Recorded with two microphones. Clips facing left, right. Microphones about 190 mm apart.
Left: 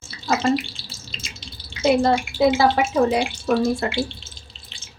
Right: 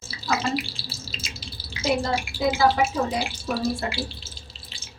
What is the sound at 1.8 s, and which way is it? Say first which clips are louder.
Speech: left 7 dB; 65° left (ahead or behind).